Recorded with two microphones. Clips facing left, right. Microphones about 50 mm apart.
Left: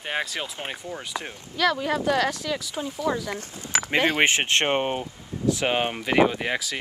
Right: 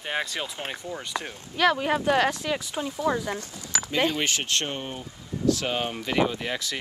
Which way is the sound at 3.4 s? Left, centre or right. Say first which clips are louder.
Left 4 dB; left.